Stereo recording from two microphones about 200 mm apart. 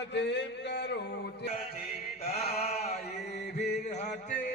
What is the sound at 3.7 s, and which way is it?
Music, 35° left (ahead or behind).